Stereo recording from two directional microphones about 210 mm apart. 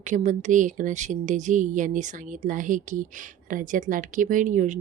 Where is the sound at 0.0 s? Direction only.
35° right (ahead or behind).